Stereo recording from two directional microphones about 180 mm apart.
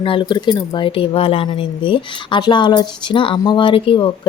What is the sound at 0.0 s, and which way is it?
Speech, 30° left (ahead or behind).